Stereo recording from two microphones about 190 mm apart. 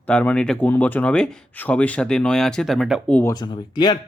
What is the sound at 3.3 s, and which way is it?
Speech, 25° left (ahead or behind).